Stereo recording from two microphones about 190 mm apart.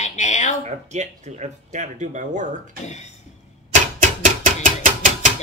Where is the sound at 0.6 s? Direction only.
35° right (ahead or behind).